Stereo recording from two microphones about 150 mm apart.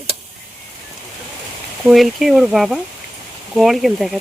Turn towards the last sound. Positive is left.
turn(degrees=0)  # may be behind; listen again after turning